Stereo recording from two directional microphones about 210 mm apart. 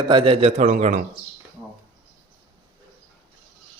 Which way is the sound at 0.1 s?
25° right (ahead or behind).